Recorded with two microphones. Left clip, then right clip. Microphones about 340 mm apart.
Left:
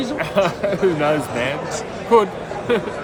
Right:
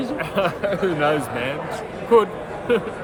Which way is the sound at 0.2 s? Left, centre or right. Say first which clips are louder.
Left 4 dB; centre.